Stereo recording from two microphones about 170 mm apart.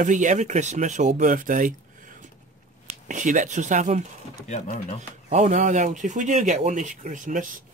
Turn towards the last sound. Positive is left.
turn(degrees=-50)  # may be behind; listen again after turning